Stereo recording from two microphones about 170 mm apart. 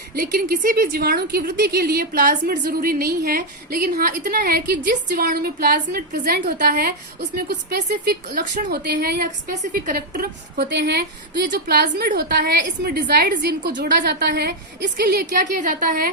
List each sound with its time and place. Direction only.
0.2 s a woman's voice: 55° right (ahead or behind); by 4.9 s 75° right (ahead or behind)
5.0 s a woman's voice: 65° right (ahead or behind)
8.3 s speech: 45° right (ahead or behind)
8.7 s a woman's voice: 65° right (ahead or behind)
9.7 s a woman's voice: 55° right (ahead or behind)